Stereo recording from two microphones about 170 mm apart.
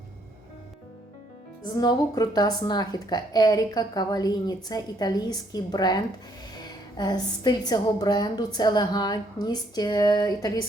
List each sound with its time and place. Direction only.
1.6 s a woman's voice: 25° left (ahead or behind)